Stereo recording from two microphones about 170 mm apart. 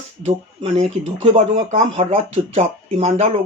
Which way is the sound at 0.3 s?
40° right (ahead or behind).